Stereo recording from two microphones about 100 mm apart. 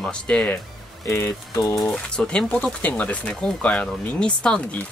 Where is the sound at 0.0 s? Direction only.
5° left (ahead or behind).